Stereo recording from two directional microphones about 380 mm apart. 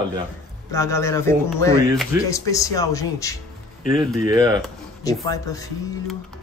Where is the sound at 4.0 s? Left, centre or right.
Centre.